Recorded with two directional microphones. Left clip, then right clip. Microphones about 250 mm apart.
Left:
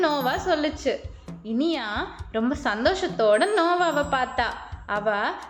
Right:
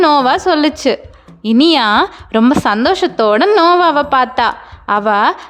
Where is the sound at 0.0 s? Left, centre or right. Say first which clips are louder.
Right 13 dB; right.